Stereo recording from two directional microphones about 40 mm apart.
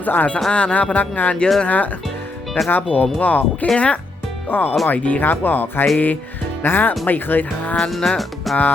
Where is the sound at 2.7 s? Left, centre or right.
Left.